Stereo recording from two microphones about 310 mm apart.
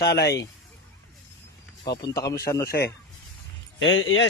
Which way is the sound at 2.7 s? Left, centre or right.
Left.